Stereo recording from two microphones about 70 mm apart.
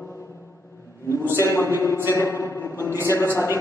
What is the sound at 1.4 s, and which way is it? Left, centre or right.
Speech, left.